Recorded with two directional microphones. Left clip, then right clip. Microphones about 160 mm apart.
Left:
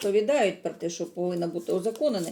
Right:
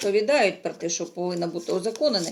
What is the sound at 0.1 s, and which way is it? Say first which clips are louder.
A woman's voice: right 3 dB; 15° left (ahead or behind).